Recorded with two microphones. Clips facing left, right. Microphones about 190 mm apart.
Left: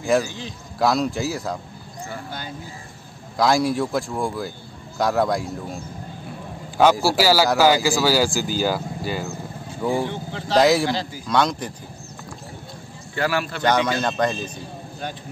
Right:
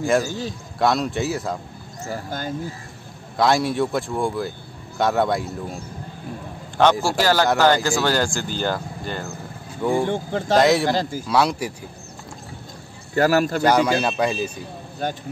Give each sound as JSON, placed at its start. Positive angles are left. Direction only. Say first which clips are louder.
{"t": 0.2, "sound": "speech", "louder": "right 3 dB", "side_deg": -40}
{"t": 0.7, "sound": "a man's voice", "louder": "even", "side_deg": 0}
{"t": 2.0, "sound": "speech", "louder": "right 6 dB", "side_deg": -40}
{"t": 3.3, "sound": "a man's voice", "louder": "even", "side_deg": 0}
{"t": 6.8, "sound": "speech", "louder": "left 1 dB", "side_deg": 5}
{"t": 10.0, "sound": "speech", "louder": "right 6 dB", "side_deg": -50}
{"t": 10.6, "sound": "a man's voice", "louder": "left 1 dB", "side_deg": 0}
{"t": 10.9, "sound": "speech", "louder": "right 4 dB", "side_deg": -45}
{"t": 11.2, "sound": "a man's voice", "louder": "left 1 dB", "side_deg": -5}
{"t": 13.1, "sound": "speech", "louder": "right 6 dB", "side_deg": -40}
{"t": 13.6, "sound": "a man's voice", "louder": "right 3 dB", "side_deg": -10}